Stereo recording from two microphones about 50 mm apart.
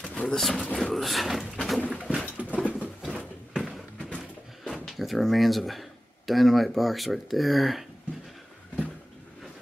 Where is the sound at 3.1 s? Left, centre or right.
Centre.